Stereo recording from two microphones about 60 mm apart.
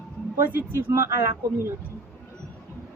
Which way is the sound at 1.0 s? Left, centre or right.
Right.